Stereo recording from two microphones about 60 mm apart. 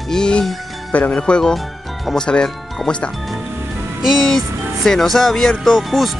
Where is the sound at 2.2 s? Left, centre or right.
Centre.